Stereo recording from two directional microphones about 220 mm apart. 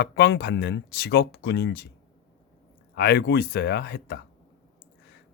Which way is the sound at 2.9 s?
50° left (ahead or behind).